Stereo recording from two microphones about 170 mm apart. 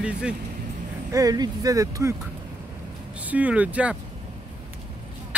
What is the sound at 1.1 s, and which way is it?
Speech, 20° right (ahead or behind).